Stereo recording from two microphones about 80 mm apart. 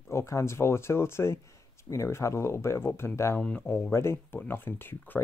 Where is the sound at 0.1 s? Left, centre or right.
Left.